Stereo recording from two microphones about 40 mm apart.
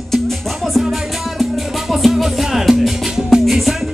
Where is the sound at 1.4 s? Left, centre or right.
Centre.